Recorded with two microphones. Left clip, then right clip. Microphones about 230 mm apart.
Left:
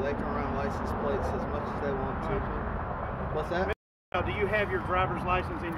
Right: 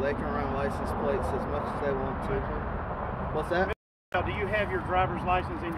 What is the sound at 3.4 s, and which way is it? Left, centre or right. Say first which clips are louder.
Speech: right 3 dB; right.